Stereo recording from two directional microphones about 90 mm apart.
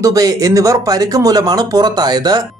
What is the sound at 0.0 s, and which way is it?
Speech, 45° right (ahead or behind).